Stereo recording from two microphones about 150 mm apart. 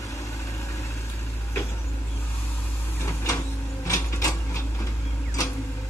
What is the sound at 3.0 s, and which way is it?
Printer, 20° left (ahead or behind).